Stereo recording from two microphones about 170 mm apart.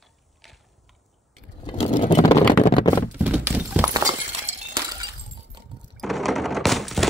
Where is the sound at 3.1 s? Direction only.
10° right (ahead or behind).